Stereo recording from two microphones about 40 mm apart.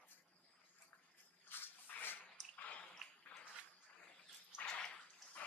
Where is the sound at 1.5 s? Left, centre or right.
Left.